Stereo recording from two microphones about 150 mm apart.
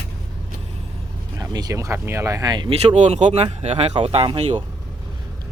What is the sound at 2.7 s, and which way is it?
Speech, 50° right (ahead or behind).